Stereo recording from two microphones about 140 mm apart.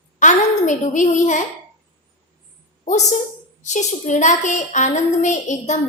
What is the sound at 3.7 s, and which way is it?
A woman's voice, 60° left (ahead or behind).